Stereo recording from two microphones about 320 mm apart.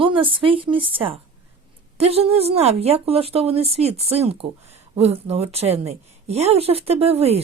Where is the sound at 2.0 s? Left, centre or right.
Centre.